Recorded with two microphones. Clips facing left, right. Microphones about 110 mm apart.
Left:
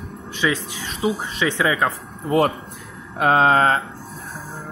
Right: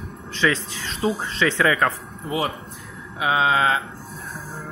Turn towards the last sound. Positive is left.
turn(degrees=45)  # may be behind; listen again after turning